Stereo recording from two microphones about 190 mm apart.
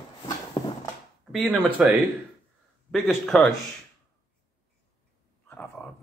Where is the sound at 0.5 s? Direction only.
25° left (ahead or behind).